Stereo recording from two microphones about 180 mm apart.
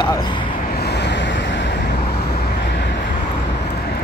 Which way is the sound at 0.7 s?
65° left (ahead or behind).